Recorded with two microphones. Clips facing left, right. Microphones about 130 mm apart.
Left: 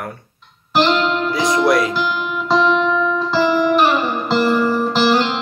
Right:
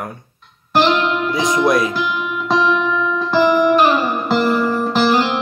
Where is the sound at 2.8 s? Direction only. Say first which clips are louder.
Left 2 dB; centre (ahead or behind).